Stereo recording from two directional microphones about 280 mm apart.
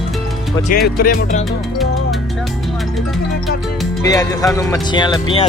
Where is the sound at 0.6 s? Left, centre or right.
Left.